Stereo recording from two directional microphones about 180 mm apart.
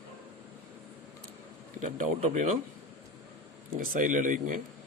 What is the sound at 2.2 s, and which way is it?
Speech, 45° right (ahead or behind).